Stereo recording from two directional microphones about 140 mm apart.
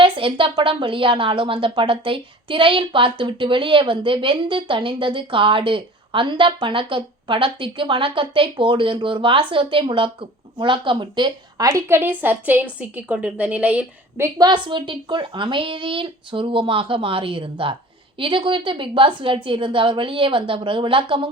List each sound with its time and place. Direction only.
0.0 s a woman's voice: 40° right (ahead or behind); by 14.3 s 10° right (ahead or behind)
14.3 s a woman's voice: 30° right (ahead or behind)